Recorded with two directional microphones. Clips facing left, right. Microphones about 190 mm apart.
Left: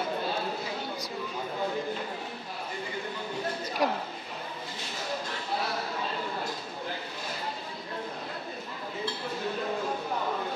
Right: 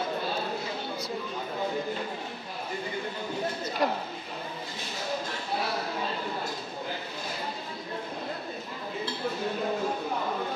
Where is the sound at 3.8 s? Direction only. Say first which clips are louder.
Even; 10° left (ahead or behind).